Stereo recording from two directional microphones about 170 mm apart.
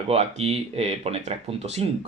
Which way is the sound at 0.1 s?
40° right (ahead or behind).